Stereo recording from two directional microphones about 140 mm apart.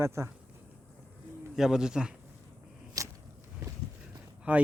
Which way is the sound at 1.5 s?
5° right (ahead or behind).